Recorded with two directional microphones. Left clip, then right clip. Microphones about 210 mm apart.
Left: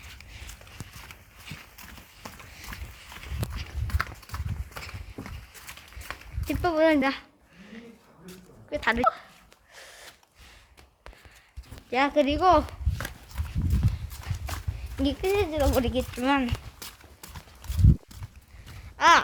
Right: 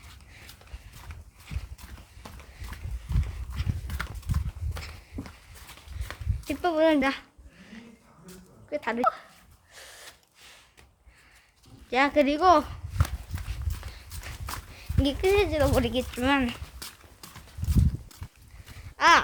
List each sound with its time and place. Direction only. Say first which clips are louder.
1.5 s clip-clop: left 4 dB; centre (ahead or behind)
2.2 s a sound: left 4 dB; 5° left (ahead or behind)
3.8 s horse: left 7 dB; 5° left (ahead or behind)
6.1 s a sound: left 1 dB; centre (ahead or behind)
8.7 s speech: left 2 dB; centre (ahead or behind)
9.7 s gasp: even; 5° right (ahead or behind)
11.9 s speech: right 1 dB; 10° right (ahead or behind)
13.8 s horse: left 8 dB; 10° right (ahead or behind)
15.0 s speech: right 2 dB; 15° right (ahead or behind)
15.8 s speech: even; 10° right (ahead or behind)
18.9 s a sound: left 1 dB; centre (ahead or behind)